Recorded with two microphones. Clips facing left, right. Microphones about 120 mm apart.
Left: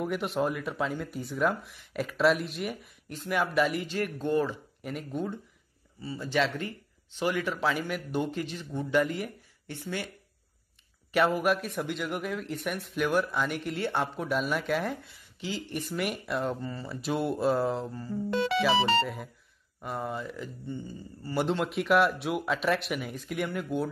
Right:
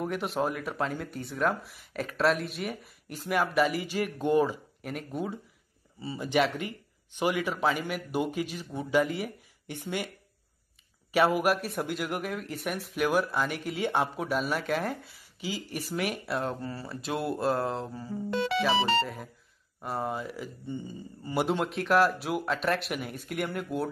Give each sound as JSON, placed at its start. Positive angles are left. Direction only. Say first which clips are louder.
{"t": 0.0, "sound": "speech", "louder": "left 1 dB", "side_deg": 0}
{"t": 4.8, "sound": "speech", "louder": "left 1 dB", "side_deg": -5}
{"t": 5.9, "sound": "speech", "louder": "right 2 dB", "side_deg": -20}
{"t": 11.1, "sound": "speech", "louder": "right 1 dB", "side_deg": -10}
{"t": 20.6, "sound": "speech", "louder": "right 2 dB", "side_deg": -15}
{"t": 21.6, "sound": "speech", "louder": "left 1 dB", "side_deg": 0}